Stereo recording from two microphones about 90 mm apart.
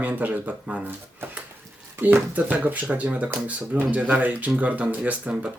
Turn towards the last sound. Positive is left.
turn(degrees=-15)  # may be behind; listen again after turning